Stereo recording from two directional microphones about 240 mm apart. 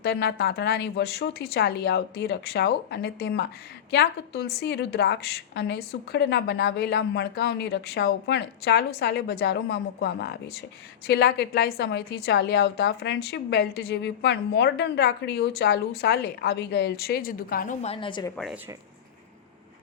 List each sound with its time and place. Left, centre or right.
0.0 s a woman's voice: left; by 18.3 s centre
18.3 s speech: centre